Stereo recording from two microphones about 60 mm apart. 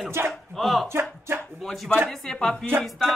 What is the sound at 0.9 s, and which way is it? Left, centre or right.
Speech, right.